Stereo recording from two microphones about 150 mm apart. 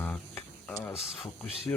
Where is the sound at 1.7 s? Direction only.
15° left (ahead or behind).